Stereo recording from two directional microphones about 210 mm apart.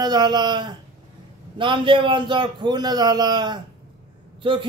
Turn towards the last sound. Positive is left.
turn(degrees=-25)  # may be behind; listen again after turning